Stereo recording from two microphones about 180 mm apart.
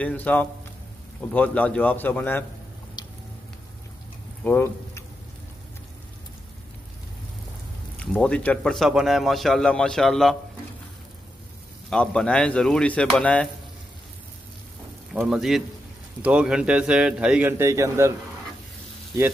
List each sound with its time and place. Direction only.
0.0 s a man's voice: 10° left (ahead or behind)
3.0 s a sound: 25° left (ahead or behind)
4.5 s speech: 10° left (ahead or behind)
8.0 s speech: 5° left (ahead or behind)
11.9 s speech: 5° left (ahead or behind)
15.1 s a man's voice: centre (ahead or behind)